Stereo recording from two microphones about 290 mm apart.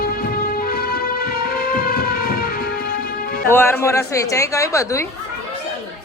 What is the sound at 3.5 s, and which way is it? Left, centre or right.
A woman's voice, centre.